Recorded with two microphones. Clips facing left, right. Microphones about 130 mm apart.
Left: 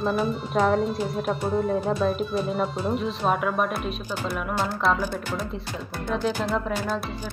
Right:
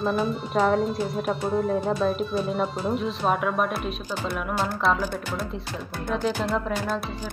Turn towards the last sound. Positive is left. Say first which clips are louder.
# even
turn(degrees=0)  # may be behind; listen again after turning